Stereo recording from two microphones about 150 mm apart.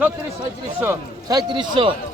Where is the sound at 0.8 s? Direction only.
25° right (ahead or behind).